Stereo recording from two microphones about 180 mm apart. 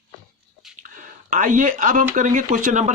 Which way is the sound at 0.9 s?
45° right (ahead or behind).